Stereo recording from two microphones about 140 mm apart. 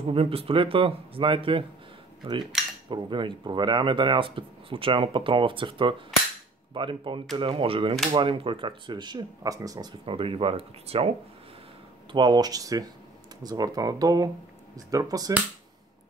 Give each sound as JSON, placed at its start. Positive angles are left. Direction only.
{"t": 0.0, "sound": "speech", "side_deg": -45}
{"t": 2.5, "sound": "cutlery", "side_deg": 0}
{"t": 2.9, "sound": "speech", "side_deg": -35}
{"t": 10.0, "sound": "speech", "side_deg": -40}
{"t": 12.1, "sound": "speech", "side_deg": -30}